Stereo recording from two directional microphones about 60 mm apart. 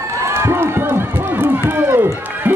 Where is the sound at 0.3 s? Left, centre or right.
Right.